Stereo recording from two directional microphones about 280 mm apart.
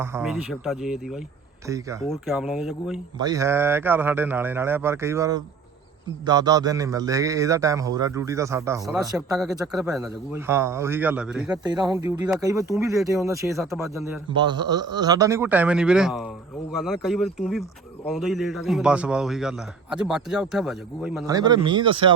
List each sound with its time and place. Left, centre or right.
0.2 s a man's voice: centre
2.0 s a man's voice: centre
3.2 s a man's voice: centre
11.5 s a man's voice: centre
13.6 s a man's voice: centre
14.3 s a man's voice: centre
21.2 s a man's voice: centre